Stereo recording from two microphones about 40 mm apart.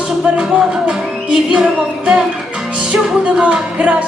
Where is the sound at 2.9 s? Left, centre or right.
Right.